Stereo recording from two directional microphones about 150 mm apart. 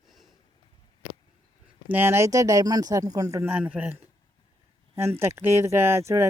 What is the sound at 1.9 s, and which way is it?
Speech, 15° right (ahead or behind).